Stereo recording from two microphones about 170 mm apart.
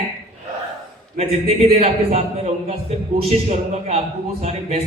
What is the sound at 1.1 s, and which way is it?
A man's voice, 35° right (ahead or behind).